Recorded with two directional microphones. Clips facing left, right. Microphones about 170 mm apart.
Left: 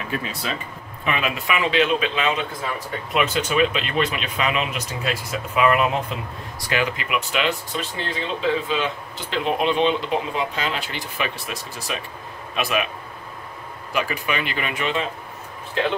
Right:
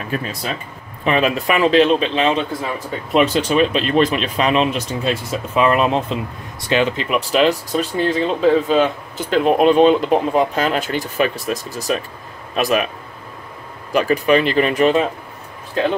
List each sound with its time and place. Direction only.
0.1 s speech: 40° right (ahead or behind); by 7.1 s 25° right (ahead or behind)
7.1 s speech: 35° right (ahead or behind)
13.9 s speech: 40° right (ahead or behind)